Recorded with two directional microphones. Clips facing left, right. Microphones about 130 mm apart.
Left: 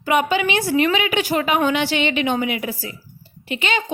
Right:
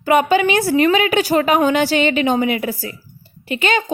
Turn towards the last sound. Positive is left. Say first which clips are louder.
# right 4 dB
turn(degrees=-45)  # may be behind; listen again after turning